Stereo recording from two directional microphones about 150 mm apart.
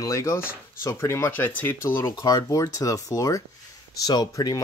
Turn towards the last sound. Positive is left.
turn(degrees=25)  # may be behind; listen again after turning